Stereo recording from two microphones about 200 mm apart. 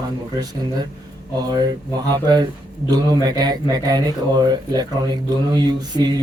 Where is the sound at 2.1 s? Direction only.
20° right (ahead or behind).